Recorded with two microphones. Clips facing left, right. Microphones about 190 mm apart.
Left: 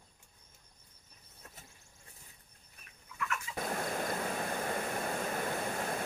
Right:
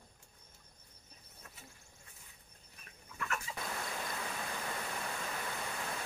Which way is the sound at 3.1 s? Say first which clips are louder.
Left 1 dB; 40° right (ahead or behind).